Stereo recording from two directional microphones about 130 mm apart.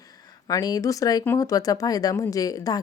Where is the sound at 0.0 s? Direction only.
30° left (ahead or behind).